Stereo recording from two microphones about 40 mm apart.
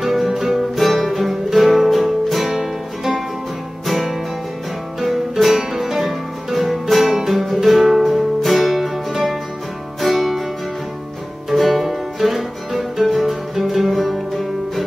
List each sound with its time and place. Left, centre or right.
0.0 s music: centre
11.5 s music: centre